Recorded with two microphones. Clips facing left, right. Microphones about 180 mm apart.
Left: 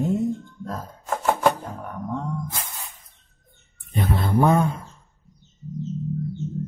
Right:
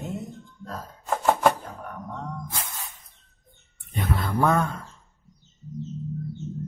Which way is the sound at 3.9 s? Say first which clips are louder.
Left 3 dB; 30° left (ahead or behind).